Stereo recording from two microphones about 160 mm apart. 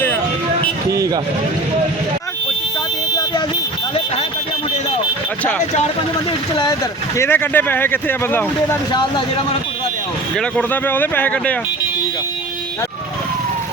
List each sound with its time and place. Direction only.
0.9 s a sound: 20° right (ahead or behind)
7.2 s speech: 15° left (ahead or behind)
8.9 s speech: 30° left (ahead or behind)
10.3 s speech: 10° left (ahead or behind)